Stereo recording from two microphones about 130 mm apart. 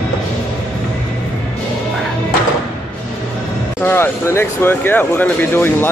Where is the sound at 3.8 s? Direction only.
15° left (ahead or behind).